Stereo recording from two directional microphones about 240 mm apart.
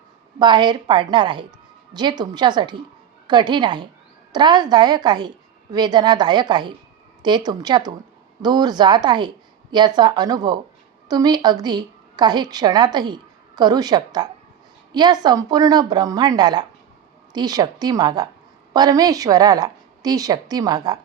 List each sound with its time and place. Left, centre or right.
0.3 s a woman's voice: centre